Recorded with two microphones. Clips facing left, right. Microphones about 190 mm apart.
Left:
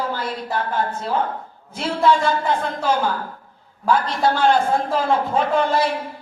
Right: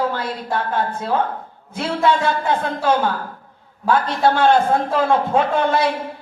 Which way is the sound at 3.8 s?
60° right (ahead or behind).